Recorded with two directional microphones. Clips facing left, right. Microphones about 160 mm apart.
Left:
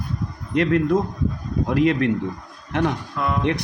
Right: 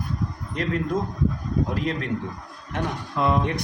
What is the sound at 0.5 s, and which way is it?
Speech, 70° left (ahead or behind).